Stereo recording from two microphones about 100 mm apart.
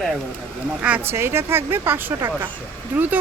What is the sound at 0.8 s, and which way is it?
Speech, 20° right (ahead or behind).